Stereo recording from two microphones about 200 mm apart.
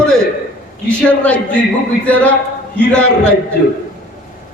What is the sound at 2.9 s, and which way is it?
Speech, 5° left (ahead or behind).